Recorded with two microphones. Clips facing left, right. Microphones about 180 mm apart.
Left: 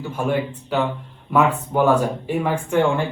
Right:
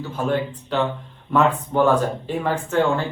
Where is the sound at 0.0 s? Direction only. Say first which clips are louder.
Left 1 dB; 10° left (ahead or behind).